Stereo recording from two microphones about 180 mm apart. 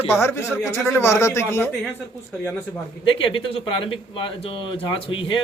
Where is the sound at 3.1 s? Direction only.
30° left (ahead or behind).